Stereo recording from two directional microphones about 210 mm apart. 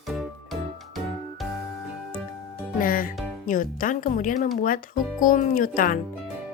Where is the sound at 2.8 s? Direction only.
40° left (ahead or behind).